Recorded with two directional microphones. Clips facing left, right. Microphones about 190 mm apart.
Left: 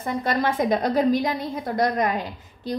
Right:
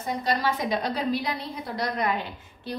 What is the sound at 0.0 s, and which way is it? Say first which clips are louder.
A woman's voice: left 3 dB; 55° left (ahead or behind).